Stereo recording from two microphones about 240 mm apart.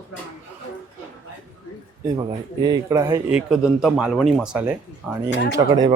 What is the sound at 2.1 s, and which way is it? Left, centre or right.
A man's voice, centre.